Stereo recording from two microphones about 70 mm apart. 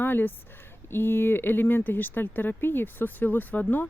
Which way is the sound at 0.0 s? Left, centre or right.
Left.